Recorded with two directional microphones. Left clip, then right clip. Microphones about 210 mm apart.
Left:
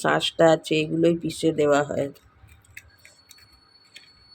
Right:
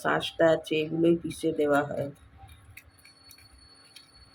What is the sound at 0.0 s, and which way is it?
Speech, 45° left (ahead or behind).